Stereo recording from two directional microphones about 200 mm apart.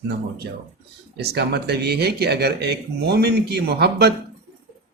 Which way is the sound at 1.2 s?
55° right (ahead or behind).